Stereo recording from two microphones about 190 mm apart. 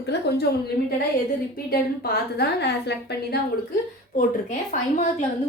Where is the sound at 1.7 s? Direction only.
55° left (ahead or behind).